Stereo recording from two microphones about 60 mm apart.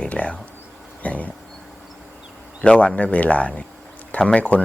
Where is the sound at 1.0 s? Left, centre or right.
Left.